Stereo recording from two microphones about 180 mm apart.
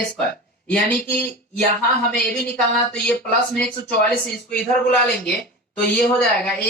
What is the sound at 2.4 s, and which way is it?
Speech, 5° left (ahead or behind).